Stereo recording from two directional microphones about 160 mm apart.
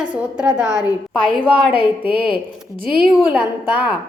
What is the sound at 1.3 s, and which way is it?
Speech, 35° left (ahead or behind).